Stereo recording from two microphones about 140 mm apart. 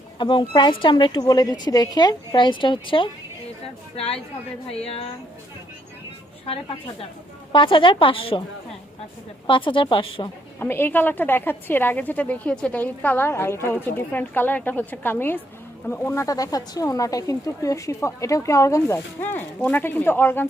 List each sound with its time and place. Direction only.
0.2 s a woman's voice: 35° left (ahead or behind)
7.5 s a woman's voice: 35° left (ahead or behind)
9.5 s a woman's voice: 35° left (ahead or behind)
10.6 s speech: 15° left (ahead or behind)